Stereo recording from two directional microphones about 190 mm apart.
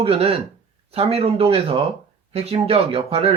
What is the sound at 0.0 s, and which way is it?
Speech, 30° right (ahead or behind).